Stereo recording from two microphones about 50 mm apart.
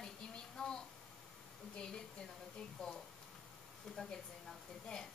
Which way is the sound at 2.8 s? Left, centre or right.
Centre.